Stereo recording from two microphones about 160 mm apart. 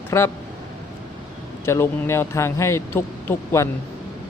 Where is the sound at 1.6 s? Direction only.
15° left (ahead or behind).